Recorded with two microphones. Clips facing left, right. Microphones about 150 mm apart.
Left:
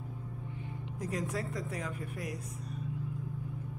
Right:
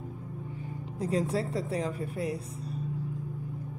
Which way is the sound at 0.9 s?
30° right (ahead or behind).